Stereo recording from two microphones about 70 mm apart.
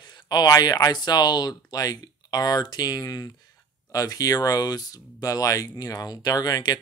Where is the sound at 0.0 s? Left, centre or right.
Left.